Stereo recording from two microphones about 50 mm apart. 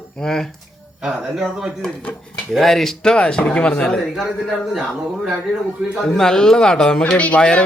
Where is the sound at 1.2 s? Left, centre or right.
Centre.